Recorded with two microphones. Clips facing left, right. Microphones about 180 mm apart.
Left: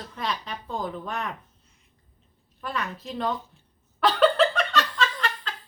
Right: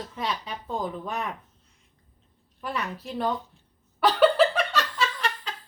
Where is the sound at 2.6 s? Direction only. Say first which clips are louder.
Even; 10° right (ahead or behind).